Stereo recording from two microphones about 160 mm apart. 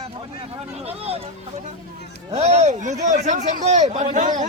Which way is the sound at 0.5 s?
40° right (ahead or behind).